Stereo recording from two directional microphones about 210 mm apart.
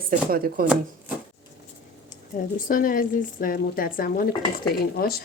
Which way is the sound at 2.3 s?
35° left (ahead or behind).